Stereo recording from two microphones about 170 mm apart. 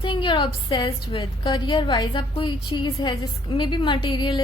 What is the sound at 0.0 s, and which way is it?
A woman's voice, 30° left (ahead or behind).